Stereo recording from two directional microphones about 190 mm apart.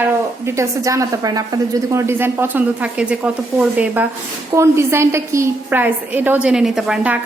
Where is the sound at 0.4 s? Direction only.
15° right (ahead or behind).